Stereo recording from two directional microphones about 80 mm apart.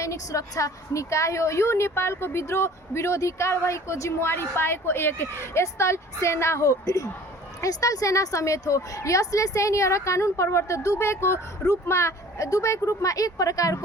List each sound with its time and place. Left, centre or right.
0.0 s a woman's voice: left
4.3 s a woman's voice: left